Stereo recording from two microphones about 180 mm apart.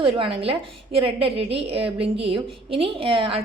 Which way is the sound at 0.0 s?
30° right (ahead or behind).